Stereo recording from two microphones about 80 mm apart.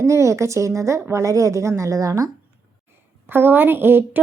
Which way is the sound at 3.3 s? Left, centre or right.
Right.